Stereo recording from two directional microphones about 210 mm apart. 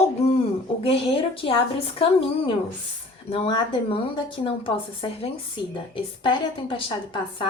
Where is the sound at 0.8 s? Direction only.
25° left (ahead or behind).